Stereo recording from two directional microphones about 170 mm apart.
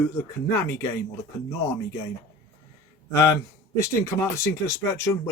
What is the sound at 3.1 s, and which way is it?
Speech, 20° left (ahead or behind).